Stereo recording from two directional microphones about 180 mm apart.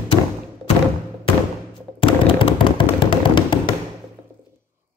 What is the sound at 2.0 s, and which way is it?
Tap, 30° left (ahead or behind).